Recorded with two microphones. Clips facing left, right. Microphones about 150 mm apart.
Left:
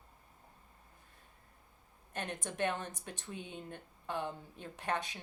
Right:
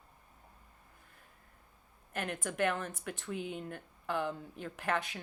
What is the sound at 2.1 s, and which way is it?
Speech, 25° left (ahead or behind).